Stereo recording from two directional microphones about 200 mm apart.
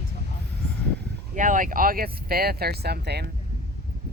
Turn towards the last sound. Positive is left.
turn(degrees=-55)  # may be behind; listen again after turning